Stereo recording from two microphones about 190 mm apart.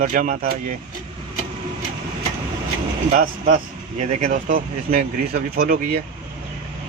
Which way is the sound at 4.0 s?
40° right (ahead or behind).